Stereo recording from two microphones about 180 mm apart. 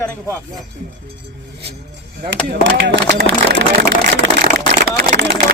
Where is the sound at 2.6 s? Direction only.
85° right; by 4.2 s 65° right (ahead or behind).